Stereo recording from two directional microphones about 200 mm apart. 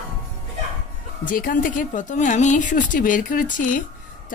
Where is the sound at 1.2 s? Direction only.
40° left (ahead or behind).